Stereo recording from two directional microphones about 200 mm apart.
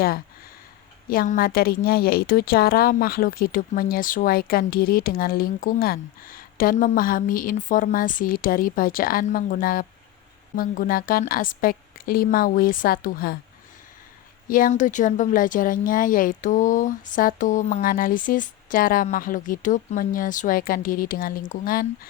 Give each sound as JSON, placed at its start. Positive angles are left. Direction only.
{"t": 1.1, "sound": "a woman's voice", "side_deg": 45}
{"t": 14.4, "sound": "a woman's voice", "side_deg": 45}